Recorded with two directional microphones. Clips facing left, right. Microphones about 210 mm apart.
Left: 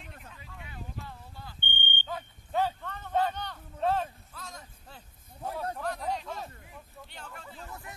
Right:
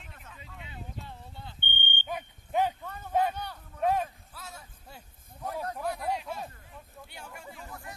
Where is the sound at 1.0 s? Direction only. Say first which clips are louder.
Even; 25° right (ahead or behind).